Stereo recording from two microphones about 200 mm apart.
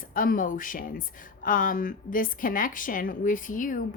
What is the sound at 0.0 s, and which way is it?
Speech, 45° left (ahead or behind).